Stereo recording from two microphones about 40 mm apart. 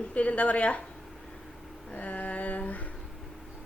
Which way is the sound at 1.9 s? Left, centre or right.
Left.